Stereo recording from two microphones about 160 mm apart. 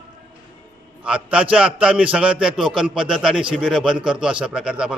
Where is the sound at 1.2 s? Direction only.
10° right (ahead or behind).